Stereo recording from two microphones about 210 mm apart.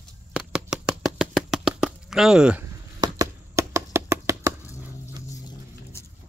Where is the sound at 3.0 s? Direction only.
15° right (ahead or behind).